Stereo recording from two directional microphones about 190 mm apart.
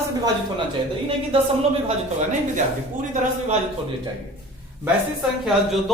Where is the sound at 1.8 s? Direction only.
40° right (ahead or behind).